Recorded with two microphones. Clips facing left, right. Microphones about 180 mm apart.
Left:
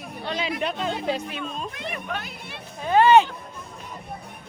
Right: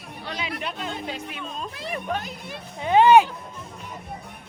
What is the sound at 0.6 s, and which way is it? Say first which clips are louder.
Speech: left 5 dB; 40° left (ahead or behind).